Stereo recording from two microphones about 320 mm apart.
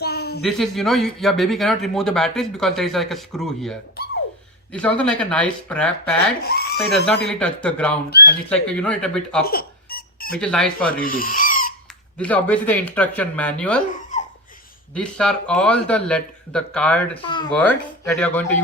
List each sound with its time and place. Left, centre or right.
0.0 s a sound: left
0.4 s a man's voice: centre
6.4 s speech: left
7.3 s a man's voice: centre
9.5 s squeak: left
10.3 s a man's voice: centre
11.0 s owl: left
12.1 s a man's voice: centre
14.9 s a man's voice: centre